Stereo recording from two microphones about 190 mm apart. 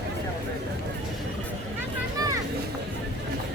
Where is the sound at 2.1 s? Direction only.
20° right (ahead or behind).